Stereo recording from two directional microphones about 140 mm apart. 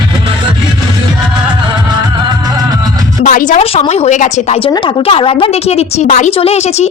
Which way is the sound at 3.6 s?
50° left (ahead or behind).